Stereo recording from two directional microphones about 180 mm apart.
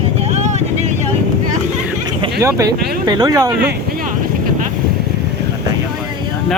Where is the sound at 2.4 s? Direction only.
20° right (ahead or behind).